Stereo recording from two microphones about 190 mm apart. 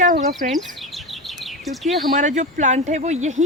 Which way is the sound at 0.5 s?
Centre (ahead or behind).